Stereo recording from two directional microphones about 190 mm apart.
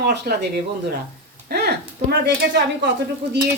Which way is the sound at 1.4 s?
55° right (ahead or behind).